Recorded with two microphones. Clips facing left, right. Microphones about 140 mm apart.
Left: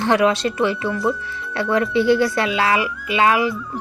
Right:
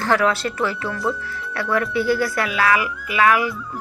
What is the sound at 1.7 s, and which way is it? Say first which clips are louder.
Speech: left 4 dB; 25° left (ahead or behind).